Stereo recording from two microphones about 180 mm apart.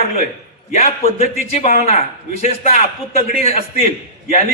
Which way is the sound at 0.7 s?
40° left (ahead or behind).